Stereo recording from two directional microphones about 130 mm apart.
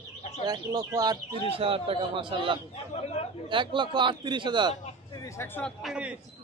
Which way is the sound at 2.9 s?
55° left (ahead or behind).